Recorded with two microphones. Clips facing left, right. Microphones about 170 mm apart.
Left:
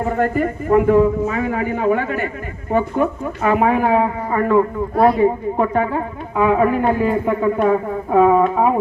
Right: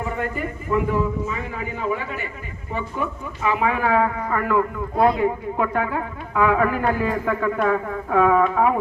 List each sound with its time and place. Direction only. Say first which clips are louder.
0.0 s a man's voice: left 8 dB; 45° left (ahead or behind)
3.8 s speech: left 3 dB; 25° left (ahead or behind)